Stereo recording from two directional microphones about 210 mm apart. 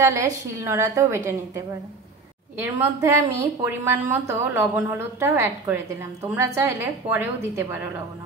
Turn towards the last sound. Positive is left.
turn(degrees=-10)  # may be behind; listen again after turning